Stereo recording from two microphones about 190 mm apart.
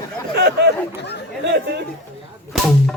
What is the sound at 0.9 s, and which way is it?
Chatter, 65° left (ahead or behind).